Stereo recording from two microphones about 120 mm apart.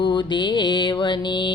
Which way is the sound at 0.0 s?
40° left (ahead or behind).